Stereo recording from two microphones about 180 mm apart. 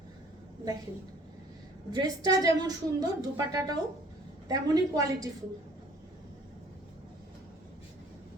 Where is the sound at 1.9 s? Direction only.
20° right (ahead or behind).